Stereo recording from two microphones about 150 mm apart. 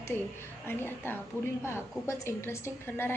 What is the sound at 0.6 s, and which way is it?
A woman's voice, 15° left (ahead or behind).